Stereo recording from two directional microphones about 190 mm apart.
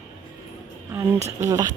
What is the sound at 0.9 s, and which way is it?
Speech, 15° right (ahead or behind).